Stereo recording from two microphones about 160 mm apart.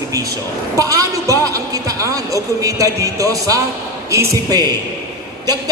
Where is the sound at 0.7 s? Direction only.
20° right (ahead or behind).